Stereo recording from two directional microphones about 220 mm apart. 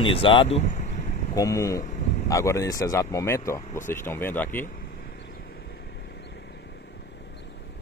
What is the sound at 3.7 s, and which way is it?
Speech, 35° left (ahead or behind).